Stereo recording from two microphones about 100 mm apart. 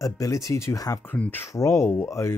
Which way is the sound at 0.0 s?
35° left (ahead or behind).